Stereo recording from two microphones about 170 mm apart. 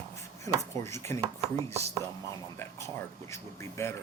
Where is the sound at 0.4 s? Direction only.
15° left (ahead or behind).